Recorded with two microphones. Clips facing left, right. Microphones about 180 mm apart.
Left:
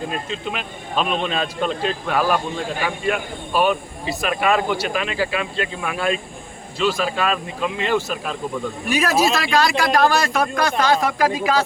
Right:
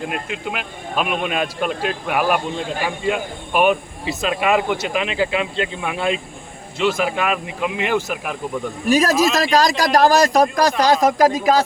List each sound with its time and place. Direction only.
0.3 s a man's voice: 10° right (ahead or behind)
8.9 s a man's voice: 40° right (ahead or behind)